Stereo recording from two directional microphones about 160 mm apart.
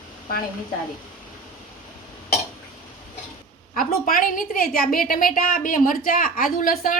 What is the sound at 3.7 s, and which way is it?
A woman's voice, 60° left (ahead or behind).